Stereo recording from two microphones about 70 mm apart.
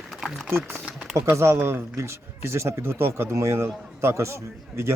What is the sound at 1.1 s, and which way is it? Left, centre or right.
Speech, right.